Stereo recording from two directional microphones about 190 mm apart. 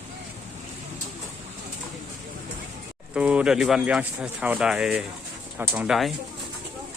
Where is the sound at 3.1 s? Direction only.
5° right (ahead or behind).